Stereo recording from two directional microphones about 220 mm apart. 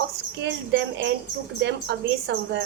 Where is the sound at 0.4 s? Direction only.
55° right (ahead or behind).